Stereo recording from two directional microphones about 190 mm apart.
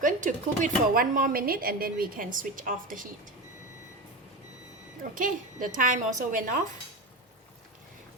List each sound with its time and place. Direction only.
0.0 s speech: 40° right (ahead or behind)
5.1 s speech: 45° right (ahead or behind)